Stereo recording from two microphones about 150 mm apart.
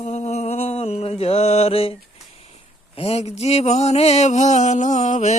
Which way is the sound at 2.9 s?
40° left (ahead or behind).